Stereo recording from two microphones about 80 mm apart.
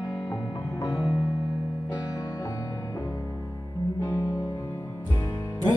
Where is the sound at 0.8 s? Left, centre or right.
Left.